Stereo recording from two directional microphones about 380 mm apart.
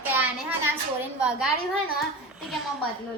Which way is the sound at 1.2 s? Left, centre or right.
Centre.